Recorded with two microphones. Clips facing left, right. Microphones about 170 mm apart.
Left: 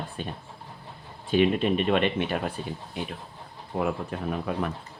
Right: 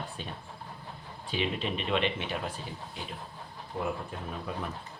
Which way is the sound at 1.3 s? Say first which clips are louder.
Left 10 dB; 50° left (ahead or behind).